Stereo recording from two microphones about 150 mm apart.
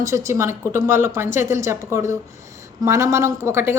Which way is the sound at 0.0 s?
20° right (ahead or behind).